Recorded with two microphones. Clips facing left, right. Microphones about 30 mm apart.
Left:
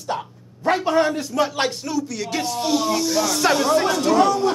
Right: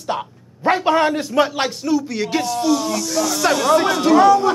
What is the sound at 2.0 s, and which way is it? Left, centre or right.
Speech, right.